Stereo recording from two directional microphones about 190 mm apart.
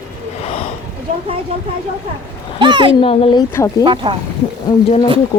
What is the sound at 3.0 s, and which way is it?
Speech, 30° left (ahead or behind).